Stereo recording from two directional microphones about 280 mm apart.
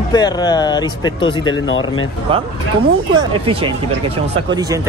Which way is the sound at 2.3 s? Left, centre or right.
Centre.